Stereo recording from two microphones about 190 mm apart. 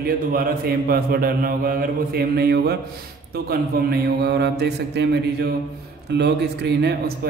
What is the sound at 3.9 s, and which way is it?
A man's voice, 60° right (ahead or behind).